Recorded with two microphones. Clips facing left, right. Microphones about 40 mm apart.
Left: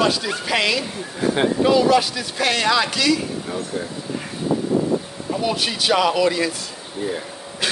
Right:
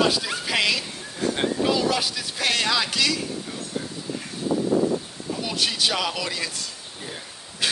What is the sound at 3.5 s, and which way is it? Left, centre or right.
Speech, left.